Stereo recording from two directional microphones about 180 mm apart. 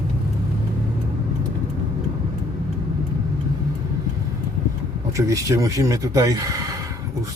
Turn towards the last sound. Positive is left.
turn(degrees=-20)  # may be behind; listen again after turning